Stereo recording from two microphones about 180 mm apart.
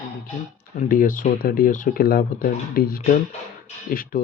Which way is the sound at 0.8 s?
50° left (ahead or behind).